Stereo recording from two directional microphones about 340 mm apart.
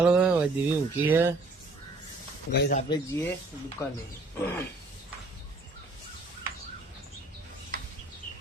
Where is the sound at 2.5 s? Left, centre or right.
Left.